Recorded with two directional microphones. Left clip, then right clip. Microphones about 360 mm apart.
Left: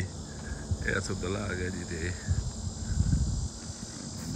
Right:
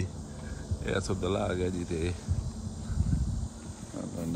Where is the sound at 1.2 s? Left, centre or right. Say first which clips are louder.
Right 4 dB; centre.